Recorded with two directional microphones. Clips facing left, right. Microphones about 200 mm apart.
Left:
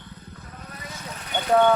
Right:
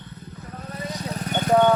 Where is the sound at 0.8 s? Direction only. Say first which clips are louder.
Right 10 dB; 35° right (ahead or behind).